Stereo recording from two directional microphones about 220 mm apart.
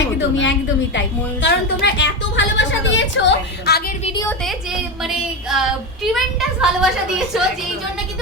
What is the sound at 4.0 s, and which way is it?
Speech, 25° left (ahead or behind).